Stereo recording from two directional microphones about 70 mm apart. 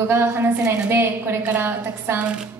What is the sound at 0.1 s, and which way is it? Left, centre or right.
Speech, right.